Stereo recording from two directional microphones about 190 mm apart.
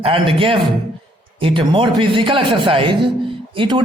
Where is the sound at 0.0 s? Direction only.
30° right (ahead or behind).